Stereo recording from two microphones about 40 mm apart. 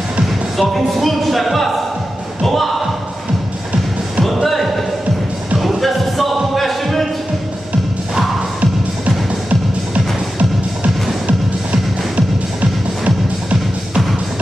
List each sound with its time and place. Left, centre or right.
0.6 s speech: centre
4.2 s music: centre
8.5 s music: right
11.2 s music: right